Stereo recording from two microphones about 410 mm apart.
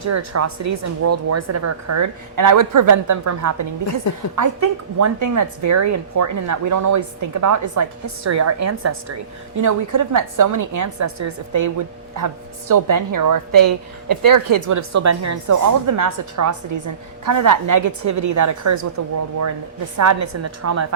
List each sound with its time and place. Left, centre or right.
0.0 s a woman's voice: right